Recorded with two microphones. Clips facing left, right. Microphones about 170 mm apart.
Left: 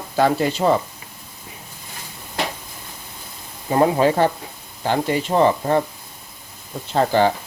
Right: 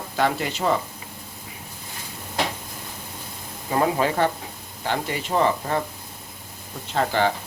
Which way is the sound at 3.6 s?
30° left (ahead or behind).